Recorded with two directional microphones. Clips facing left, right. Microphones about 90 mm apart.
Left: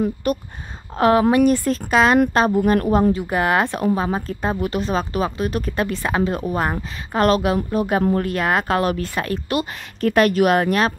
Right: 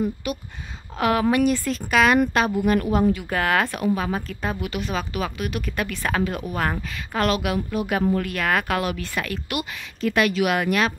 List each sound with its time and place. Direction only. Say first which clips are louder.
0.2 s speech: left 7 dB; 45° left (ahead or behind)
0.9 s speech: left 5 dB; 35° left (ahead or behind)
1.4 s speech: left 5 dB; 45° left (ahead or behind)
1.9 s speech: left 2 dB; 30° left (ahead or behind)
3.3 s speech: left 3 dB; 20° left (ahead or behind)
7.2 s speech: left 6 dB; 35° left (ahead or behind)
9.9 s speech: left 5 dB; 45° left (ahead or behind)